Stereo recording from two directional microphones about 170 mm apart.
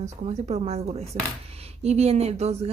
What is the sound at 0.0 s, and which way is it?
A woman's voice, 45° right (ahead or behind).